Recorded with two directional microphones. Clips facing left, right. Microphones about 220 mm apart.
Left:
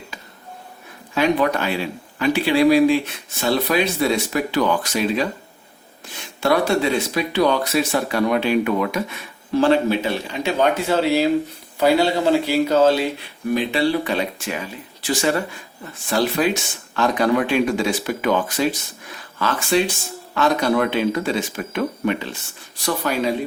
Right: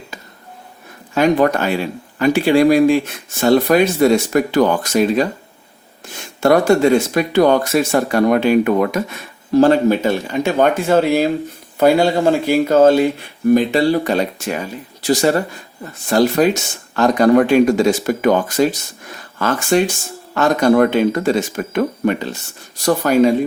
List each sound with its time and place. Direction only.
1.1 s speech: 45° right (ahead or behind)
6.4 s speech: 45° right (ahead or behind)